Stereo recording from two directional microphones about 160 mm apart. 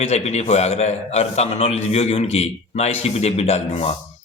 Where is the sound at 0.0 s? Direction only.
45° left (ahead or behind).